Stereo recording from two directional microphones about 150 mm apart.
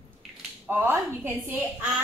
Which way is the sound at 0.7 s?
15° right (ahead or behind).